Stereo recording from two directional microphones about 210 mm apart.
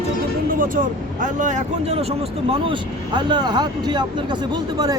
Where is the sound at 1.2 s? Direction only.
35° right (ahead or behind).